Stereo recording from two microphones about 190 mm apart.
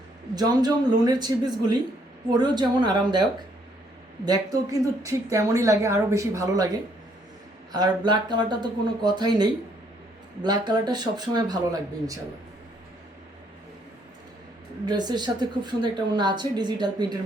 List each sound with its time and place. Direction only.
0.3 s a woman's voice: 20° right (ahead or behind)
4.3 s a woman's voice: 20° right (ahead or behind)
7.7 s a woman's voice: 20° right (ahead or behind)
14.8 s a woman's voice: 20° right (ahead or behind)